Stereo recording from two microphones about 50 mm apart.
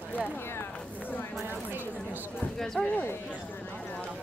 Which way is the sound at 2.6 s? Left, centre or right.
Centre.